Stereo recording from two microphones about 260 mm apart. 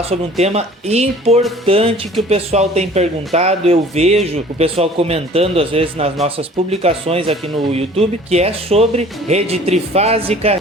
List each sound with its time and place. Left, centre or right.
0.0 s speech: right